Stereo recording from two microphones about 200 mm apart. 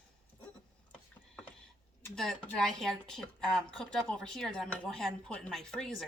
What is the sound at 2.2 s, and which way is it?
Speech, centre (ahead or behind).